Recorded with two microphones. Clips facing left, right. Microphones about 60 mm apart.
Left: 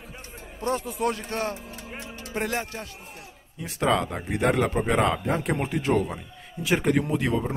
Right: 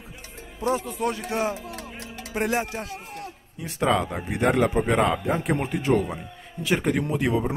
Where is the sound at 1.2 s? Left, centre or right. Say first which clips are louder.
Right 3 dB; centre.